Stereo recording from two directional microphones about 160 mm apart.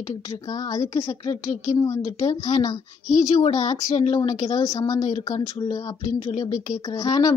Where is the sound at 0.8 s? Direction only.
20° left (ahead or behind).